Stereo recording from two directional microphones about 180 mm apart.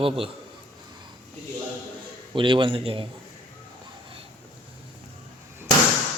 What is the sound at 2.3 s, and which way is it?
Speech, 30° right (ahead or behind).